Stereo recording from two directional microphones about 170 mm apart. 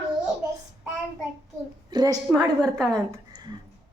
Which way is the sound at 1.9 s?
25° right (ahead or behind).